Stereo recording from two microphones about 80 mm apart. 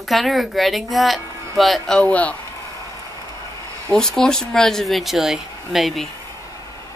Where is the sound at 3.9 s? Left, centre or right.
Centre.